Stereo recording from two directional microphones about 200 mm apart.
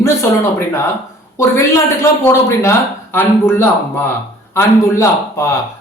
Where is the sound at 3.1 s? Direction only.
10° left (ahead or behind).